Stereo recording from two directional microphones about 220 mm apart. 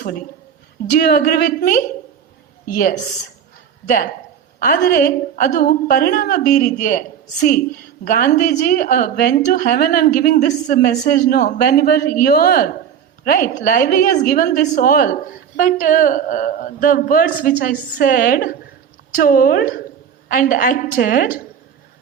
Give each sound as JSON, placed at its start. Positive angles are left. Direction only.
{"t": 0.9, "sound": "a woman's voice", "side_deg": 40}